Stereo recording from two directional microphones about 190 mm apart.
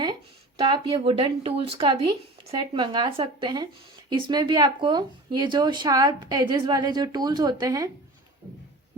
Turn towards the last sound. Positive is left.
turn(degrees=-20)  # may be behind; listen again after turning